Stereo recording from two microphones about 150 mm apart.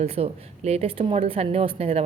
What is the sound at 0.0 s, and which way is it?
A woman's voice, 45° right (ahead or behind).